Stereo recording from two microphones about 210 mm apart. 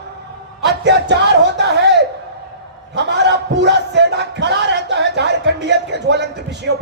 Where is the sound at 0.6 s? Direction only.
55° right (ahead or behind).